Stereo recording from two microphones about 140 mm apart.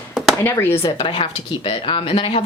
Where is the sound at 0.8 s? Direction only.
40° left (ahead or behind).